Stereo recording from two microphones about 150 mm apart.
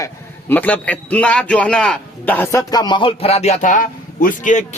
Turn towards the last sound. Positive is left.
turn(degrees=55)  # may be behind; listen again after turning